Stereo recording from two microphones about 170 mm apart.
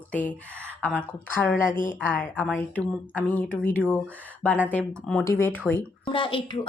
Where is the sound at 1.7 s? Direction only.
55° left (ahead or behind).